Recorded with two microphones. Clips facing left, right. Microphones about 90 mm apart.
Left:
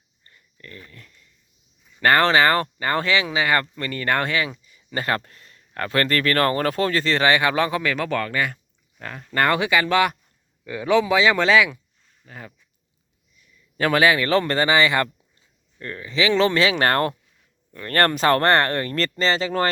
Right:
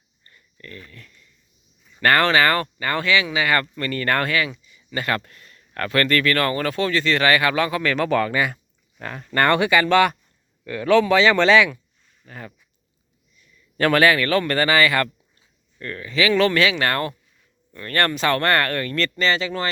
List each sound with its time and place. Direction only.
0.3 s a sound: 15° left (ahead or behind)
2.0 s speech: 20° left (ahead or behind)
4.6 s speech: 40° left (ahead or behind)
7.8 s speech: 10° left (ahead or behind)
8.0 s speech: 5° right (ahead or behind)
13.4 s a sound: 10° left (ahead or behind)
14.3 s speech: 30° left (ahead or behind)
16.7 s speech: 45° left (ahead or behind)